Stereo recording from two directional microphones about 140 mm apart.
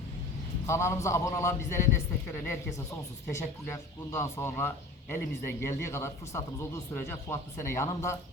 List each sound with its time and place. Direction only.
0.7 s speech: 20° left (ahead or behind)
3.2 s speech: 20° left (ahead or behind)